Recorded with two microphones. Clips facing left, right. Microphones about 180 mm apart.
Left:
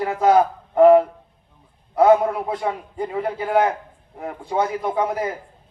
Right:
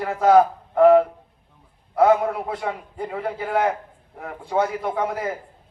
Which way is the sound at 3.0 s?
15° left (ahead or behind).